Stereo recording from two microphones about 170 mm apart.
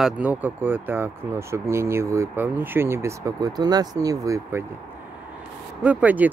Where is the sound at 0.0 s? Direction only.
10° right (ahead or behind).